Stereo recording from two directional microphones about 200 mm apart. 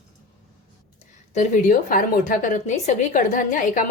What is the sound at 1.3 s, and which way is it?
Speech, 40° left (ahead or behind).